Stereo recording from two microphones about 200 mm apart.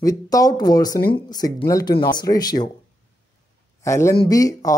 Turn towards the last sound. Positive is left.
turn(degrees=15)  # may be behind; listen again after turning